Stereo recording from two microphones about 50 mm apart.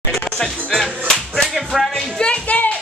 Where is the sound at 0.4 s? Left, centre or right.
Centre.